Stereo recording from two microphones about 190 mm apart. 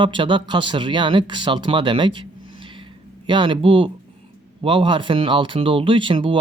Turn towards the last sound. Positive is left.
turn(degrees=-25)  # may be behind; listen again after turning